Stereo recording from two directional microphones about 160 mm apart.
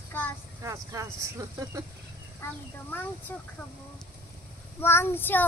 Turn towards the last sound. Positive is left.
turn(degrees=15)  # may be behind; listen again after turning